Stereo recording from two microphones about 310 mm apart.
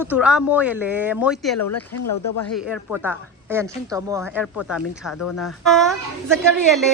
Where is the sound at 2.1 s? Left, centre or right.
Left.